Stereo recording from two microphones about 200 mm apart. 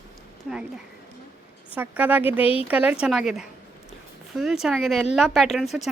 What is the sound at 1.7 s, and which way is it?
Speech, 10° right (ahead or behind).